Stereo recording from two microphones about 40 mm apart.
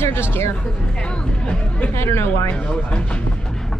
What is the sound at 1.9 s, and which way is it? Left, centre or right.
Speech, left.